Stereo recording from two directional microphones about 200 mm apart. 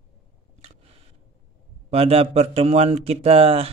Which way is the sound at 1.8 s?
30° right (ahead or behind).